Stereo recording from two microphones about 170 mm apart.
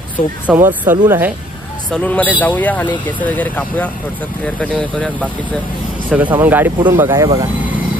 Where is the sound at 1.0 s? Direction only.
10° right (ahead or behind).